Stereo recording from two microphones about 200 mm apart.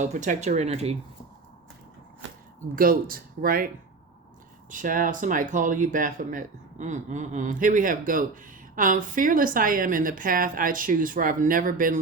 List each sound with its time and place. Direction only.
0.0 s speech: 40° right (ahead or behind)
2.7 s a woman's voice: 45° right (ahead or behind)
4.7 s a woman's voice: 40° right (ahead or behind)